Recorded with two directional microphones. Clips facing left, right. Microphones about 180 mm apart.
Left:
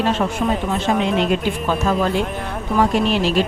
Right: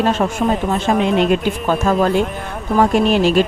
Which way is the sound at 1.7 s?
50° right (ahead or behind).